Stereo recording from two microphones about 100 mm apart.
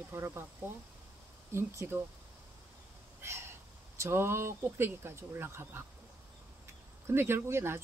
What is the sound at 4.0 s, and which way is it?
Speech, 25° right (ahead or behind).